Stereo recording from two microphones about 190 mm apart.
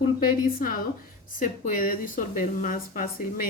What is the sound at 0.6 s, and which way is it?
Speech, 50° left (ahead or behind).